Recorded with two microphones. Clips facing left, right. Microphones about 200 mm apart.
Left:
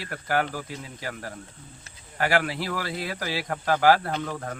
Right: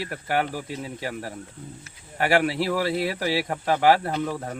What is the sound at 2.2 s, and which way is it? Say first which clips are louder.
Speech: right 4 dB; 25° right (ahead or behind).